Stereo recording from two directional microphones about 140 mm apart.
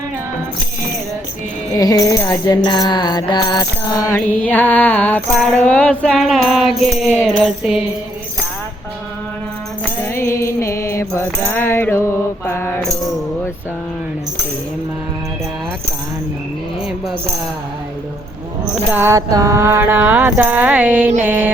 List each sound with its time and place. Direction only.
1.7 s music: 25° left (ahead or behind)
4.4 s music: 15° left (ahead or behind)
9.8 s music: 20° left (ahead or behind)
18.6 s speech: 5° right (ahead or behind)
19.0 s mantra: 25° right (ahead or behind)